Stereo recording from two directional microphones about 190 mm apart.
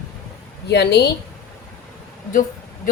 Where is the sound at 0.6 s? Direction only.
60° left (ahead or behind).